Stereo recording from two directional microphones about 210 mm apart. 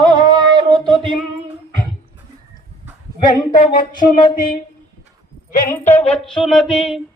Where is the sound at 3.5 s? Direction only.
40° left (ahead or behind).